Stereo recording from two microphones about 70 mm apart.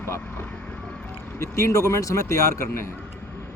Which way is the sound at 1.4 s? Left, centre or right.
Left.